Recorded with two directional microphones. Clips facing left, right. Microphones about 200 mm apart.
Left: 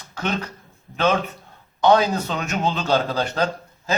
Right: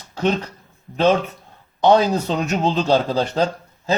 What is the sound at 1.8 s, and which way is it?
Speech, 35° right (ahead or behind).